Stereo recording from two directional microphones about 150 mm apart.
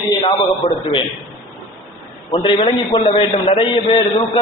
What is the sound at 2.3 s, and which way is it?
A man's voice, 35° left (ahead or behind).